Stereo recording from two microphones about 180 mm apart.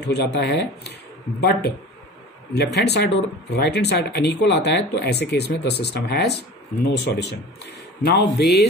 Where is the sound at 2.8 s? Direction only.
65° left (ahead or behind).